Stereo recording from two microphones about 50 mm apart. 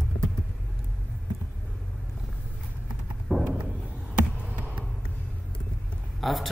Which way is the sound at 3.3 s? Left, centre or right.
Centre.